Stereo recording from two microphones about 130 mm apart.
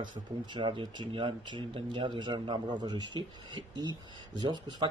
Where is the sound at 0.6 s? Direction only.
40° right (ahead or behind).